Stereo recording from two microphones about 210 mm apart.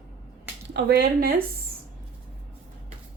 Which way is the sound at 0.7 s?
50° right (ahead or behind).